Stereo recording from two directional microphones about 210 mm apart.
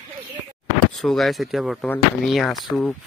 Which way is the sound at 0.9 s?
Centre (ahead or behind).